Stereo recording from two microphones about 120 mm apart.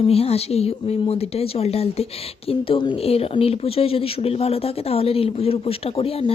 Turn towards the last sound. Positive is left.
turn(degrees=55)  # may be behind; listen again after turning